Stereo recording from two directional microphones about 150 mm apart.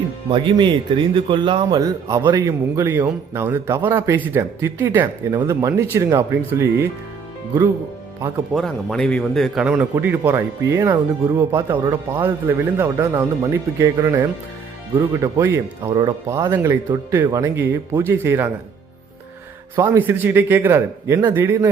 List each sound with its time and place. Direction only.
0.3 s a man's voice: 35° right (ahead or behind)
2.8 s speech: 15° right (ahead or behind)
8.5 s speech: centre (ahead or behind)
9.6 s speech: 10° right (ahead or behind)
19.7 s speech: 15° right (ahead or behind)